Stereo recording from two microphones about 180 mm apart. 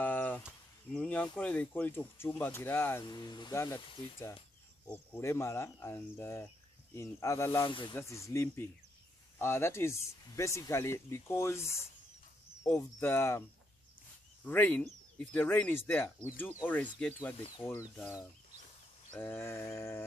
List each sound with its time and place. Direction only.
0.0 s a sound: 10° left (ahead or behind)
0.9 s speech: 5° left (ahead or behind)
7.6 s speech: 25° left (ahead or behind)
7.9 s speech: 15° left (ahead or behind)
14.4 s speech: 10° left (ahead or behind)
19.1 s speech: 10° left (ahead or behind)